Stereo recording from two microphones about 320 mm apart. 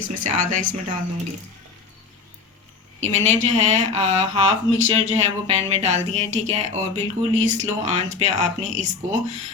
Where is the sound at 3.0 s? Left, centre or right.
Right.